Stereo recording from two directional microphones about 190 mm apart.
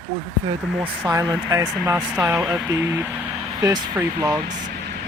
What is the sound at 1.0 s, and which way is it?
Speech, 15° right (ahead or behind).